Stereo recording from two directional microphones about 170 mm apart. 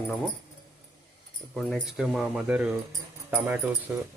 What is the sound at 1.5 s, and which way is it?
Speech, centre (ahead or behind).